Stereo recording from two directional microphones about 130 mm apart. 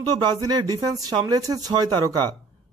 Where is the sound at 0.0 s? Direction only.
35° right (ahead or behind).